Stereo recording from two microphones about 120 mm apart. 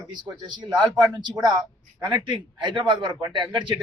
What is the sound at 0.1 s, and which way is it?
A man's voice, 40° right (ahead or behind).